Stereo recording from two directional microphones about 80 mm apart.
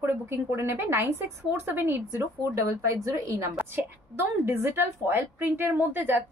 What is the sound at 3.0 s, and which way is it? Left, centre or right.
Speech, right.